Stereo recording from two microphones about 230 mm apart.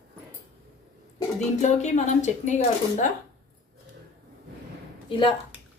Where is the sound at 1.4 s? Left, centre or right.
Left.